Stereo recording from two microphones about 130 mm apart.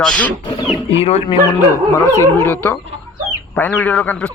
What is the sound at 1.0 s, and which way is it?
Speech, 50° left (ahead or behind).